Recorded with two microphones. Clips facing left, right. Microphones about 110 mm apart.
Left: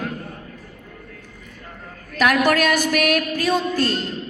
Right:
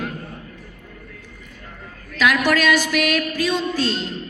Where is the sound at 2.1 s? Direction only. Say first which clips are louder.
Left 1 dB; 50° left (ahead or behind).